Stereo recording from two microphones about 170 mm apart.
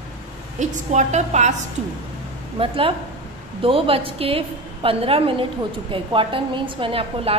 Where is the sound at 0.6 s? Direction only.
45° right (ahead or behind).